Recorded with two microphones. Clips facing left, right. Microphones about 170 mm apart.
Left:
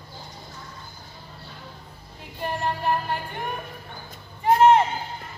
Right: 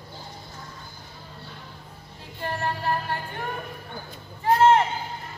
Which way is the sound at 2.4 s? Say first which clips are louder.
Left 2 dB; 15° left (ahead or behind).